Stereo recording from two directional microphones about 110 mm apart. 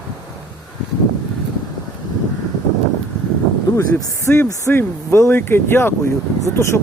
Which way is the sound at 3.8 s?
30° left (ahead or behind).